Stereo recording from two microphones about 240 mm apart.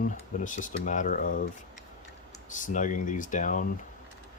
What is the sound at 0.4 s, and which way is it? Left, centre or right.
Speech, left.